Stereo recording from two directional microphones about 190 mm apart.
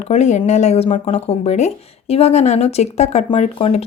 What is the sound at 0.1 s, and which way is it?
Speech, 35° left (ahead or behind).